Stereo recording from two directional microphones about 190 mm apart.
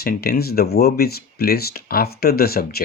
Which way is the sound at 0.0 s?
55° left (ahead or behind).